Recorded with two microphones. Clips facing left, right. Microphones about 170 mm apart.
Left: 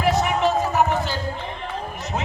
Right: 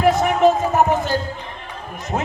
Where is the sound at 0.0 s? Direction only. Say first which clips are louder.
Right 5 dB; 50° right (ahead or behind).